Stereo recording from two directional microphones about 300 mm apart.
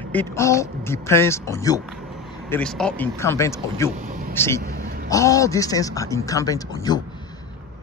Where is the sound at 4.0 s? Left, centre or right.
Right.